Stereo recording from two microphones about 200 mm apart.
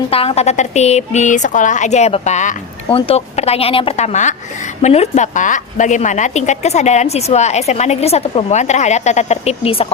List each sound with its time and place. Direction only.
0.1 s a woman's voice: 30° left (ahead or behind)